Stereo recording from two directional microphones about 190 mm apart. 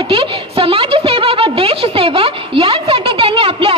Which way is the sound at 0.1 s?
30° right (ahead or behind).